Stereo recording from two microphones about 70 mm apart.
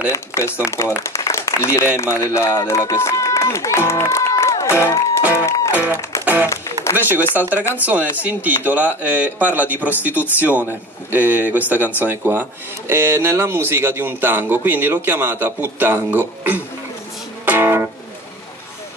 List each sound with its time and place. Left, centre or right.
0.1 s speech: left
1.0 s applause: left
2.0 s speech: left
5.4 s music: left
5.7 s speech: right
6.2 s music: right
7.0 s speech: right
17.5 s music: right